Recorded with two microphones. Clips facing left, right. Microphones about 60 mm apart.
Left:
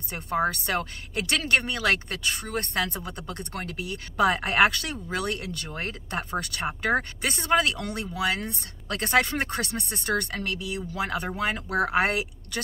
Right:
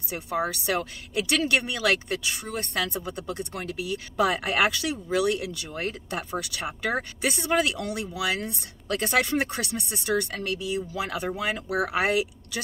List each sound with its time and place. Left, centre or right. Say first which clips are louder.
0.1 s speech: left 2 dB; left